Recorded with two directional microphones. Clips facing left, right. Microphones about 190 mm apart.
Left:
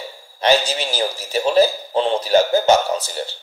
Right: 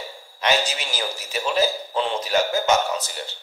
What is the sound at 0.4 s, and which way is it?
Speech, 30° left (ahead or behind).